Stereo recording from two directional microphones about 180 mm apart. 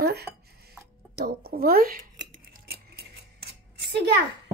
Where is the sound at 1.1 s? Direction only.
60° right (ahead or behind).